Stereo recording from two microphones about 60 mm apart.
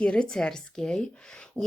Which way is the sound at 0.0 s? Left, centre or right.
Centre.